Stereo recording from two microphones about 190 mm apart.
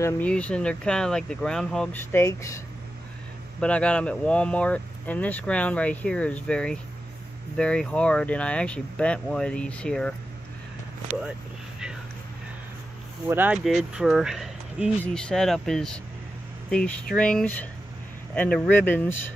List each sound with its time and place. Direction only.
0.0 s speech: 5° left (ahead or behind)
3.6 s speech: 5° left (ahead or behind)
11.1 s speech: 40° right (ahead or behind)
13.3 s speech: 10° right (ahead or behind); by 19.1 s 10° left (ahead or behind)